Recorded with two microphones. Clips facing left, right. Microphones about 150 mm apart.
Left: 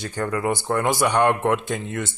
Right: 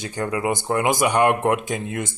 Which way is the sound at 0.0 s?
15° right (ahead or behind).